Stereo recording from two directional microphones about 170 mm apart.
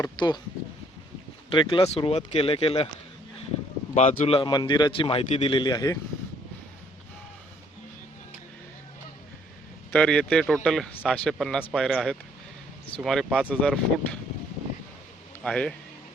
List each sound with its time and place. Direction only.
0.0 s speech: 25° left (ahead or behind)
1.5 s speech: 25° left (ahead or behind)
4.3 s speech: 30° left (ahead or behind)
9.9 s speech: 5° left (ahead or behind)
15.4 s speech: 5° left (ahead or behind)